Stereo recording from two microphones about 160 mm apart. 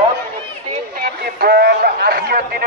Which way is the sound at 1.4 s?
75° right (ahead or behind).